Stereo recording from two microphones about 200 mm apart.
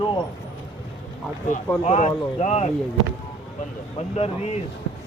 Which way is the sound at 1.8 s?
35° left (ahead or behind).